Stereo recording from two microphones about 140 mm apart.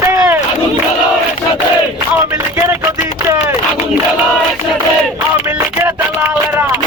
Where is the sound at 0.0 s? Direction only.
20° right (ahead or behind).